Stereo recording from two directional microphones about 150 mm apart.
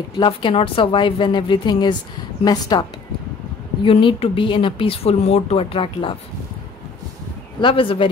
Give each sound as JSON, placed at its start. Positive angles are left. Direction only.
{"t": 0.2, "sound": "a woman's voice", "side_deg": 35}
{"t": 3.8, "sound": "speech", "side_deg": 40}
{"t": 7.6, "sound": "speech", "side_deg": 35}